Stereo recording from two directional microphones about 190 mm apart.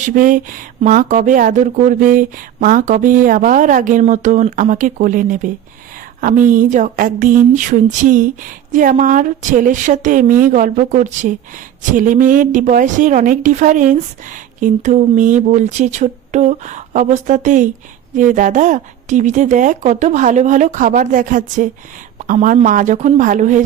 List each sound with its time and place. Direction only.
0.0 s speech: 45° right (ahead or behind)